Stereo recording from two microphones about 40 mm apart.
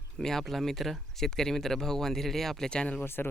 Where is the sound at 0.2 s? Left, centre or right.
Centre.